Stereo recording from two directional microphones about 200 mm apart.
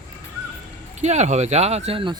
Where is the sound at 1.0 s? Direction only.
35° right (ahead or behind).